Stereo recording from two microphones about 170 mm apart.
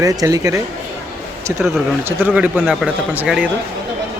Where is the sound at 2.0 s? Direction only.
10° right (ahead or behind).